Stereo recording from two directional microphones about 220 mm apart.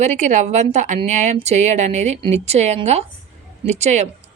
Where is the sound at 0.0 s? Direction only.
35° right (ahead or behind).